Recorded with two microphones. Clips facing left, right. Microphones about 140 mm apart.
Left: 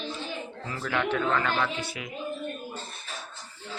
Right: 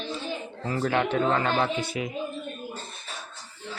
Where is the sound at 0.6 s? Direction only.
35° right (ahead or behind).